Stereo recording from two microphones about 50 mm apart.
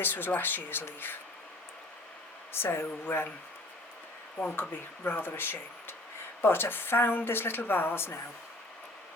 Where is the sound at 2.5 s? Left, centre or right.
Left.